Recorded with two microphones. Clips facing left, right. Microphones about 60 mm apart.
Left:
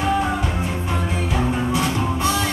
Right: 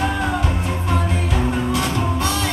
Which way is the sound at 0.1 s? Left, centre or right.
Centre.